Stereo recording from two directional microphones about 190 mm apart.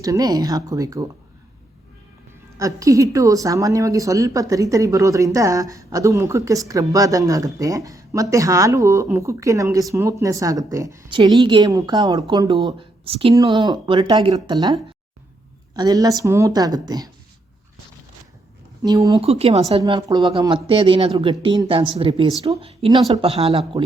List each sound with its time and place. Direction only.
0.0 s speech: 20° right (ahead or behind)
2.6 s a woman's voice: 15° right (ahead or behind)
18.8 s speech: 15° right (ahead or behind)
19.2 s speech: 30° right (ahead or behind)
19.8 s speech: 20° right (ahead or behind)